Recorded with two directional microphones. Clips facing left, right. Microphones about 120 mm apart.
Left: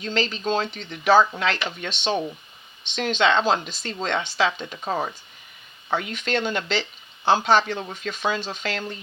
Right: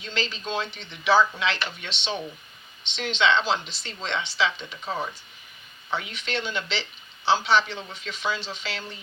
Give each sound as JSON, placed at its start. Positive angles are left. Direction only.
{"t": 0.0, "sound": "speech", "side_deg": 45}